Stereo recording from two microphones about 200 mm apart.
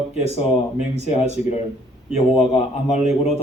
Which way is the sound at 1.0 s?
30° left (ahead or behind).